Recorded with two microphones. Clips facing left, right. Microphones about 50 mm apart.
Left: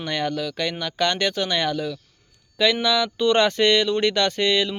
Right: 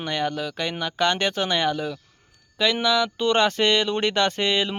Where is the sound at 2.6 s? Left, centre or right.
Centre.